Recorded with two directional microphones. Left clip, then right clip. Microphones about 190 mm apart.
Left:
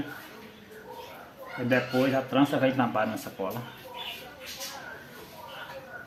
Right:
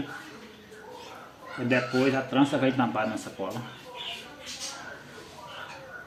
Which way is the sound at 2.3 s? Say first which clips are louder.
Left 2 dB; 20° left (ahead or behind).